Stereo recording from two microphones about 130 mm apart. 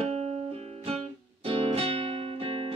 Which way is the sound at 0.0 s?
50° right (ahead or behind).